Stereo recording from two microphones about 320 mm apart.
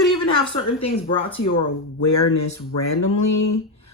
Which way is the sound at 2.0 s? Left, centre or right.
Left.